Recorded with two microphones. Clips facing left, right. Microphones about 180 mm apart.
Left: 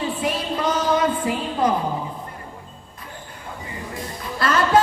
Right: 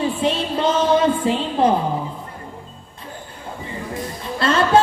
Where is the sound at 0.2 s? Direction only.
25° right (ahead or behind).